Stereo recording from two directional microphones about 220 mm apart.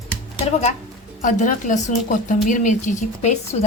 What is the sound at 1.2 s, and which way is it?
A woman's voice, 35° left (ahead or behind).